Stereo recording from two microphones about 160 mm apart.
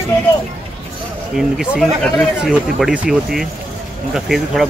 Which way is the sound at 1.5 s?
Centre (ahead or behind).